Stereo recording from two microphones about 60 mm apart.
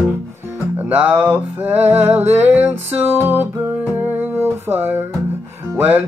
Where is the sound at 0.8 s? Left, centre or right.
Right.